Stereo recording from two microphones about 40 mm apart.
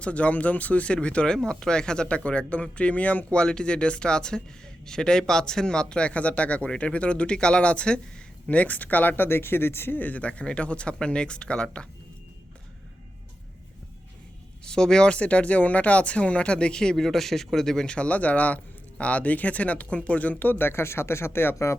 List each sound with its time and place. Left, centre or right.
0.0 s speech: left
1.5 s speech: centre
2.0 s speech: left
3.3 s speech: left
8.4 s speech: left
10.0 s speech: left
14.6 s speech: centre
15.1 s speech: left; by 17.1 s centre
17.1 s a man's voice: centre
17.8 s speech: left
20.5 s speech: left